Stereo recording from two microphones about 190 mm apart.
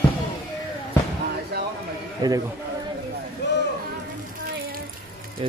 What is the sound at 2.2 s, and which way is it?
Speech, 20° right (ahead or behind).